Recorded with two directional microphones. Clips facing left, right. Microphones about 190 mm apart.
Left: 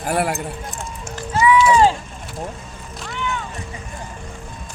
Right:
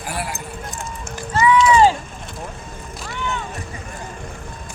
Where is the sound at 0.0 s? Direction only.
60° left (ahead or behind).